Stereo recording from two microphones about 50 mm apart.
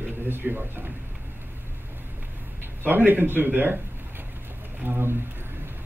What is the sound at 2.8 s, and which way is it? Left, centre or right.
Speech, right.